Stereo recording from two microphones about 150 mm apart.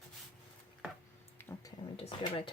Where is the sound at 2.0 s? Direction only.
35° left (ahead or behind).